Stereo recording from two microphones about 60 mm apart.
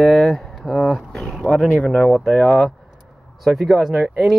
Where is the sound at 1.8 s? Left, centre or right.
Centre.